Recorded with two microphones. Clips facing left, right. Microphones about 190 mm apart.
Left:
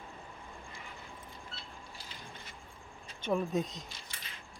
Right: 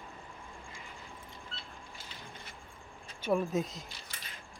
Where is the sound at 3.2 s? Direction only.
5° right (ahead or behind).